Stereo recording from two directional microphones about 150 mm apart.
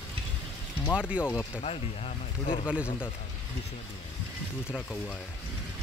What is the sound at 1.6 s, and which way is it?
Speech, 40° left (ahead or behind).